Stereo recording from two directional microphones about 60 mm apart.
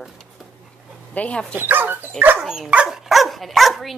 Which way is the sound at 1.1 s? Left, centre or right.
Left.